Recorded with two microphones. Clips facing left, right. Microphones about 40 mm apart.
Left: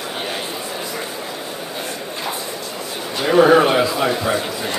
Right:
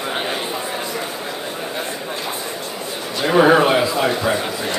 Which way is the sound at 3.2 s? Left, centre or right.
Centre.